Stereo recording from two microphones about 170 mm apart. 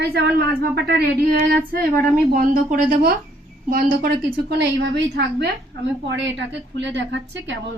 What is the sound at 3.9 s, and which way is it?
A woman's voice, 75° right (ahead or behind).